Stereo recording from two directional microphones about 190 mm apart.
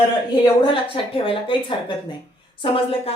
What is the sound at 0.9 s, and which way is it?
A woman's voice, 30° left (ahead or behind).